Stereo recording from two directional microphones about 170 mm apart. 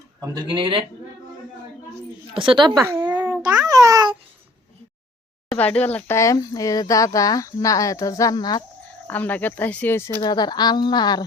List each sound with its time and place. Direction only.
0.2 s speech: 25° right (ahead or behind)
2.3 s speech: 30° right (ahead or behind)
2.8 s speech: 15° right (ahead or behind)
3.1 s babbling: 25° right (ahead or behind)
5.5 s speech: 10° left (ahead or behind); by 8.6 s 25° left (ahead or behind)
9.0 s speech: 10° left (ahead or behind)
10.2 s speech: 25° left (ahead or behind)